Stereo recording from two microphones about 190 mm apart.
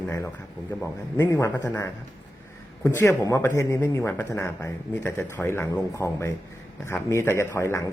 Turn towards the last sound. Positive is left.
turn(degrees=15)  # may be behind; listen again after turning